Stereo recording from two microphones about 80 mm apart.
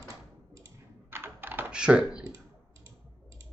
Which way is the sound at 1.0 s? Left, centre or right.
Right.